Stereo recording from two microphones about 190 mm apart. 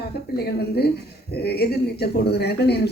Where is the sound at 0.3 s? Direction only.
55° left (ahead or behind).